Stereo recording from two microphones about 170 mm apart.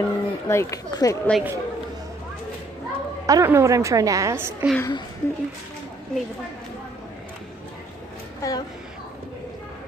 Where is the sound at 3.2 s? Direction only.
20° right (ahead or behind).